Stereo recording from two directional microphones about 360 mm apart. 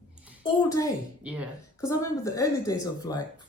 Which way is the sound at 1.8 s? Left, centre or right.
Centre.